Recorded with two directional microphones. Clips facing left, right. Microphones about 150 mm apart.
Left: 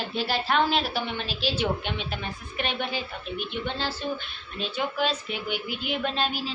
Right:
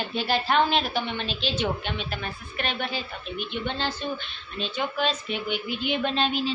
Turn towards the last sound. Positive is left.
turn(degrees=5)  # may be behind; listen again after turning